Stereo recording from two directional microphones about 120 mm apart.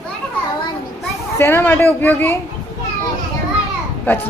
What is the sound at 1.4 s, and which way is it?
Speech, 20° left (ahead or behind).